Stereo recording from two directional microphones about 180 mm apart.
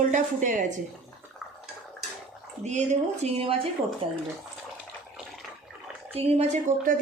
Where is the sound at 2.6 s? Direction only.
40° right (ahead or behind).